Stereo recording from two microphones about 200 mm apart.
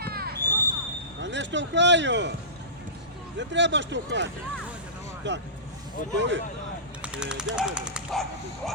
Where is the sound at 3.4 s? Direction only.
65° right (ahead or behind).